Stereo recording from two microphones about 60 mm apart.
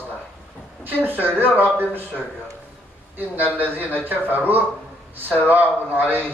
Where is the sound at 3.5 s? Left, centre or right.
Right.